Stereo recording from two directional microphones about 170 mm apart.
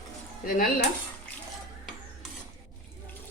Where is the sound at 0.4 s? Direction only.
55° left (ahead or behind).